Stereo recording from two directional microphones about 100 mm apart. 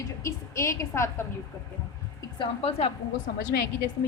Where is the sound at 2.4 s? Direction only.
75° left (ahead or behind).